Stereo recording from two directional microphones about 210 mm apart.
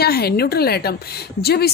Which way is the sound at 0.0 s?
50° left (ahead or behind).